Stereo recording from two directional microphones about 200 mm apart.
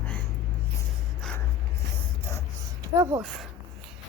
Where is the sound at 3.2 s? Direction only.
Centre (ahead or behind).